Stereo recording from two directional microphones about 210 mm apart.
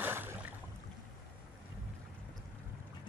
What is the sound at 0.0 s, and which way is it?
Boat, 10° right (ahead or behind).